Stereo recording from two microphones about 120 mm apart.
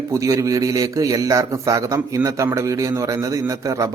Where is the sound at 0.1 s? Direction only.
25° right (ahead or behind).